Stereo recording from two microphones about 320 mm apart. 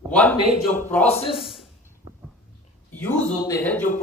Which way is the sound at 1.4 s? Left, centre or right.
Centre.